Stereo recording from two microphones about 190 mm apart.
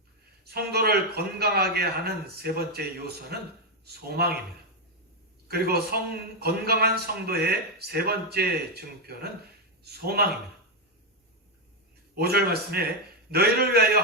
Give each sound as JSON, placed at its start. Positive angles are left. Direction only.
{"t": 0.4, "sound": "a man's voice", "side_deg": -55}
{"t": 3.8, "sound": "a man's voice", "side_deg": -55}
{"t": 5.5, "sound": "a man's voice", "side_deg": -55}
{"t": 12.1, "sound": "a man's voice", "side_deg": -55}